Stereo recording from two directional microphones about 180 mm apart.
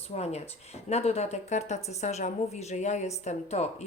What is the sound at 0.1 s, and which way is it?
Speech, 35° left (ahead or behind).